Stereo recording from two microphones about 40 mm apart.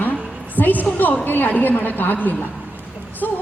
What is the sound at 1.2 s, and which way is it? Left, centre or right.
A woman's voice, left.